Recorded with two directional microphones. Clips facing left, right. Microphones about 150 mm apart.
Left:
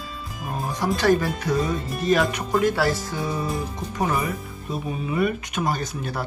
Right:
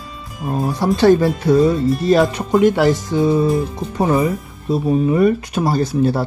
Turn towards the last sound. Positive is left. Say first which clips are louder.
# right 12 dB
turn(degrees=-30)  # may be behind; listen again after turning